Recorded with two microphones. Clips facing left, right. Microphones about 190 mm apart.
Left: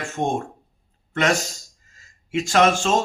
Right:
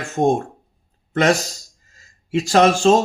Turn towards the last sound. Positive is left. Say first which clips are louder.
# right 5 dB
turn(degrees=-35)  # may be behind; listen again after turning